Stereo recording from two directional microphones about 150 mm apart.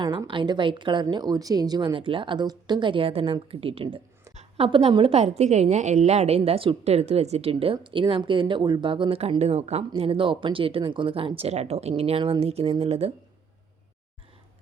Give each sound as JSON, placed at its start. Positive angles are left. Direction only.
{"t": 0.0, "sound": "a woman's voice", "side_deg": -30}